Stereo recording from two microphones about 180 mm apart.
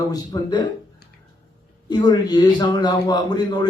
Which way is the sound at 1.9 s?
25° left (ahead or behind).